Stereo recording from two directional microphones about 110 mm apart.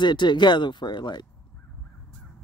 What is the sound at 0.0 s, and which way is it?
Speech, 45° left (ahead or behind).